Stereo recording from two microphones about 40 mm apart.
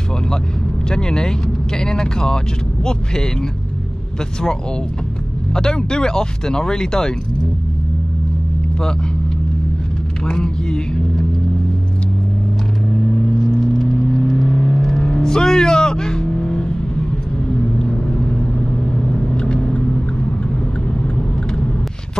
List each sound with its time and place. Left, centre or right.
0.8 s speech: centre
5.5 s speech: centre
10.2 s vehicle: centre
13.4 s car: centre
14.8 s vehicle: centre